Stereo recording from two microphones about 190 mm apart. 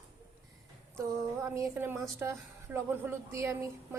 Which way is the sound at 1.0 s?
15° right (ahead or behind).